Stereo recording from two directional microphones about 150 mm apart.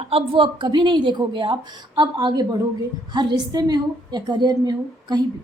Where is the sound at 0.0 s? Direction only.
40° right (ahead or behind).